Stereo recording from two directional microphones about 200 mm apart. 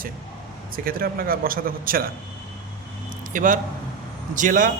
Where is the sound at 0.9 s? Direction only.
45° right (ahead or behind).